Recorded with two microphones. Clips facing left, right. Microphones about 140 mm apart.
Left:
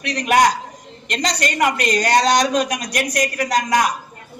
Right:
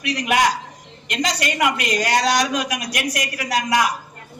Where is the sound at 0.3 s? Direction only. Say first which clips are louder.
Left 4 dB; 45° left (ahead or behind).